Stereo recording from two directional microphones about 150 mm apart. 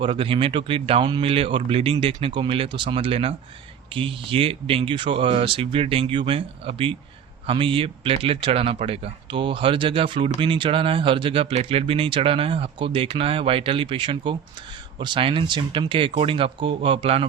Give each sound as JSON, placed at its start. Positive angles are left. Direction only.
{"t": 0.0, "sound": "speech", "side_deg": -40}